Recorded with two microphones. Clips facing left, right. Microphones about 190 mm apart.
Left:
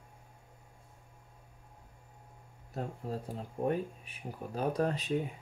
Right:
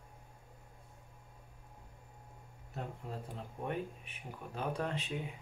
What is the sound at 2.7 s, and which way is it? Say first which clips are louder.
Speech: left 6 dB; 40° left (ahead or behind).